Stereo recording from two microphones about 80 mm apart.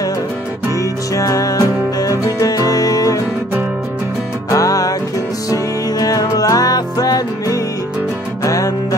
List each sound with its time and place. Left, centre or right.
1.1 s music: left
4.5 s music: left